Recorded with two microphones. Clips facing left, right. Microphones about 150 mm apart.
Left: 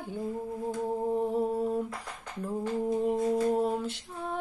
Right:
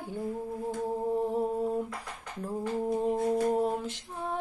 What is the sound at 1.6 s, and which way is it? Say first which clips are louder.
Humming: left 1 dB; 10° right (ahead or behind).